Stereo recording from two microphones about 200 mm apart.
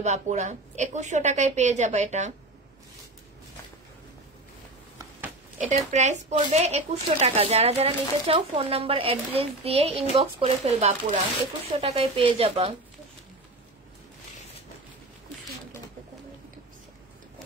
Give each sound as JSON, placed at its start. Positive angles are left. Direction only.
{"t": 0.0, "sound": "speech", "side_deg": -35}
{"t": 5.9, "sound": "a woman's voice", "side_deg": -35}